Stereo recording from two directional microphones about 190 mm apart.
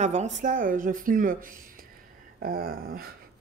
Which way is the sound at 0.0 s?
35° right (ahead or behind).